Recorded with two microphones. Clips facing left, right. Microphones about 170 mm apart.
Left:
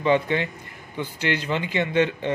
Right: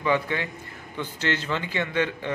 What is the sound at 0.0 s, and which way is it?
Speech, 25° left (ahead or behind).